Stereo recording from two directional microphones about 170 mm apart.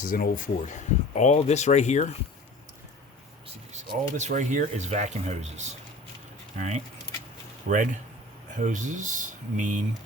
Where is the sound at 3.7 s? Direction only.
45° right (ahead or behind).